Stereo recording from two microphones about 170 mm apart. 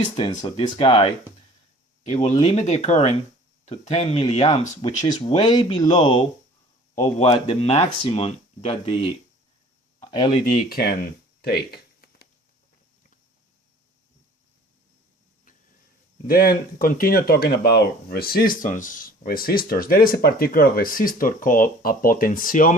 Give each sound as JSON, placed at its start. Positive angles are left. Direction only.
{"t": 0.0, "sound": "speech", "side_deg": 30}
{"t": 2.0, "sound": "speech", "side_deg": 45}
{"t": 5.0, "sound": "speech", "side_deg": 25}
{"t": 7.2, "sound": "speech", "side_deg": 40}
{"t": 10.5, "sound": "speech", "side_deg": 60}
{"t": 11.4, "sound": "a sound", "side_deg": 70}
{"t": 16.2, "sound": "speech", "side_deg": 60}